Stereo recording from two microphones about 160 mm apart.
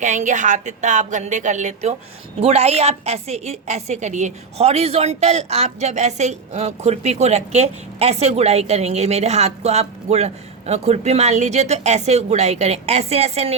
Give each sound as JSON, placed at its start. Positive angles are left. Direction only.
{"t": 0.0, "sound": "a woman's voice", "side_deg": -50}